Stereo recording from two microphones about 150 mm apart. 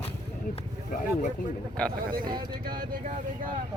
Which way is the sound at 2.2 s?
30° right (ahead or behind).